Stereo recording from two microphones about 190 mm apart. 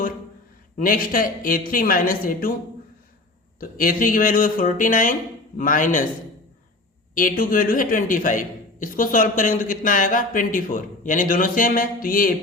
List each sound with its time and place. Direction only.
0.8 s a man's voice: 45° left (ahead or behind)
3.6 s a man's voice: 45° left (ahead or behind)
7.1 s a man's voice: 45° left (ahead or behind)